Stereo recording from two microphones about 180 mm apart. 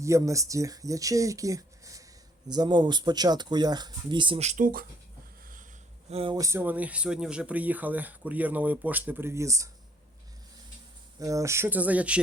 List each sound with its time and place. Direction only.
0.0 s speech: 15° right (ahead or behind); by 4.9 s 50° right (ahead or behind)
6.1 s speech: 35° right (ahead or behind)
6.3 s speech: 15° right (ahead or behind)
11.2 s speech: 20° right (ahead or behind)